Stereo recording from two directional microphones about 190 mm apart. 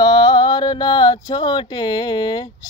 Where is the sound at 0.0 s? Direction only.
20° left (ahead or behind).